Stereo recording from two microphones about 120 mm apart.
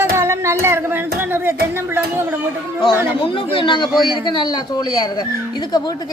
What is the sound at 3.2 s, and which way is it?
A man's voice, 45° left (ahead or behind).